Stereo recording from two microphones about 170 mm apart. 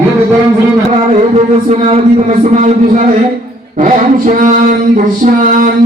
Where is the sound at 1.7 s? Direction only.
45° right (ahead or behind).